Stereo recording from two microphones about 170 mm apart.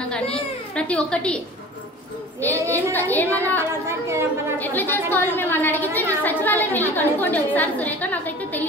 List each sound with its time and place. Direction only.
0.7 s a woman's voice: 5° left (ahead or behind)
2.7 s a woman's voice: 10° left (ahead or behind)
3.8 s a woman's voice: 15° right (ahead or behind)
4.6 s a woman's voice: 10° left (ahead or behind)